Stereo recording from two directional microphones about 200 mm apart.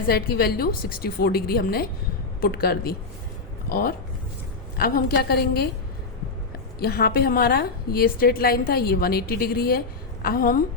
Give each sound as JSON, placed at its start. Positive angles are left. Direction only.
{"t": 0.1, "sound": "a woman's voice", "side_deg": 50}
{"t": 6.7, "sound": "a woman's voice", "side_deg": 50}